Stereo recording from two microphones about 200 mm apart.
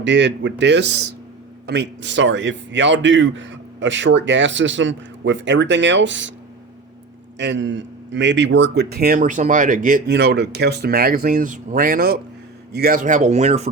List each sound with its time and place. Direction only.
0.0 s a man's voice: 60° right (ahead or behind)
7.3 s a man's voice: 65° right (ahead or behind); by 13.7 s 35° right (ahead or behind)